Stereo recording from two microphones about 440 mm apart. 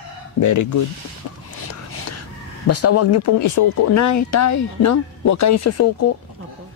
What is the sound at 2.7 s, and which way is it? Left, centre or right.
Speech, left.